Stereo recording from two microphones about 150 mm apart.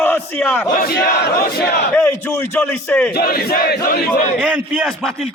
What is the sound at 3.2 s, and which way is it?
Battle cry, 85° left.